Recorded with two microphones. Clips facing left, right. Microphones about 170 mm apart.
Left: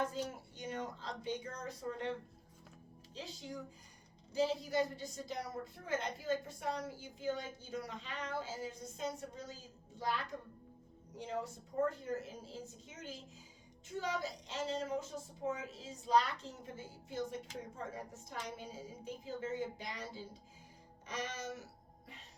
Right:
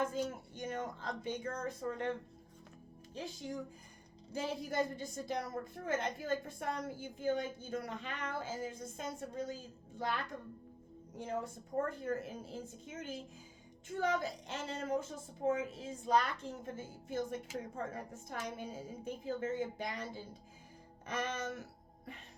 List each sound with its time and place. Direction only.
0.0 s a woman's voice: 50° right (ahead or behind)
3.2 s a woman's voice: 50° right (ahead or behind)
11.2 s a woman's voice: 50° right (ahead or behind)